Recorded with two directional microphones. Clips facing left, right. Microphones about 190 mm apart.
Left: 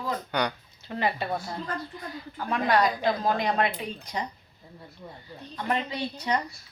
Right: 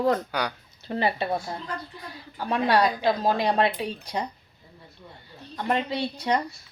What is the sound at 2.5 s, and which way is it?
Speech, 30° right (ahead or behind).